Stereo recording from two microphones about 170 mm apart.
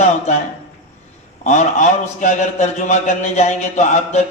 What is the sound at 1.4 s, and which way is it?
A man's voice, 45° left (ahead or behind).